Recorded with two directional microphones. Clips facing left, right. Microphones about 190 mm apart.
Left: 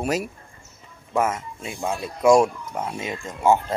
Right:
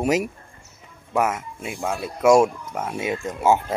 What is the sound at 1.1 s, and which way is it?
Speech, centre (ahead or behind).